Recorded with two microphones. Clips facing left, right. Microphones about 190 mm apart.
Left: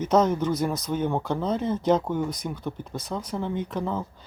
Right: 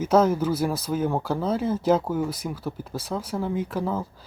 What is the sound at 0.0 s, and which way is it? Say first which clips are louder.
Speech: right 2 dB; 5° right (ahead or behind).